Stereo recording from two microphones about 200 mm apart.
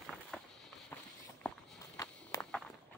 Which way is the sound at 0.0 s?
5° left (ahead or behind).